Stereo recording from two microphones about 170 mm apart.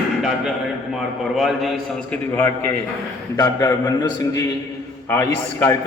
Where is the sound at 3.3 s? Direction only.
25° left (ahead or behind).